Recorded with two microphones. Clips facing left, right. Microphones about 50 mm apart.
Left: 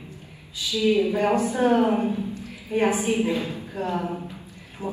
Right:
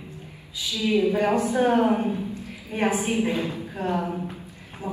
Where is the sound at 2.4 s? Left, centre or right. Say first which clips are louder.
Left 7 dB; right.